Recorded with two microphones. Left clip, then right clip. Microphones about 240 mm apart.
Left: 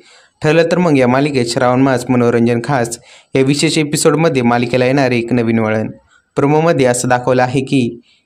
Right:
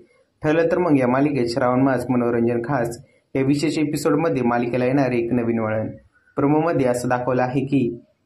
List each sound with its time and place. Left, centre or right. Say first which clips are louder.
0.4 s speech: left 7 dB; left